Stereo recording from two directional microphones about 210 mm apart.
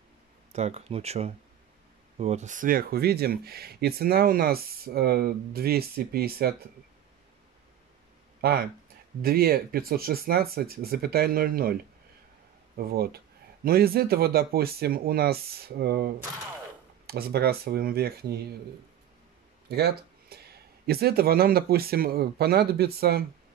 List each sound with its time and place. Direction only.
0.5 s speech: 30° right (ahead or behind); by 6.5 s 45° right (ahead or behind)
8.4 s speech: 45° right (ahead or behind)
19.7 s speech: 50° right (ahead or behind)